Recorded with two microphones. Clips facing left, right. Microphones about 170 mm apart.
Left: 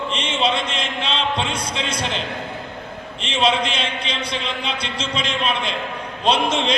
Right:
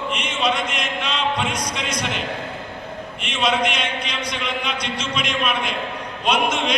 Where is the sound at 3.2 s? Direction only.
30° left (ahead or behind).